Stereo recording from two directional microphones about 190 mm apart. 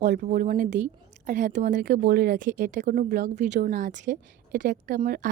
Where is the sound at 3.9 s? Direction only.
60° right (ahead or behind).